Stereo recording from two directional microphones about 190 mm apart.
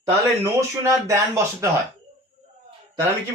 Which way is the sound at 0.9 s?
15° right (ahead or behind).